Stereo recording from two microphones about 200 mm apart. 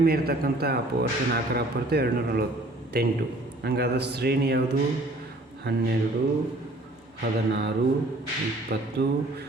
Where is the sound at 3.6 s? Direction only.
55° right (ahead or behind).